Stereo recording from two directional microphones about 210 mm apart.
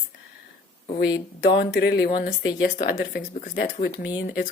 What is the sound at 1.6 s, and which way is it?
Speech, 50° left (ahead or behind).